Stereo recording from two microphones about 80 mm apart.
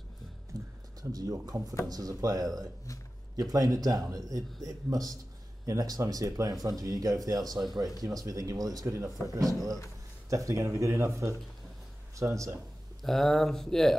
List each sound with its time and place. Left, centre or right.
0.5 s a sound: right
1.1 s speech: right
13.0 s speech: centre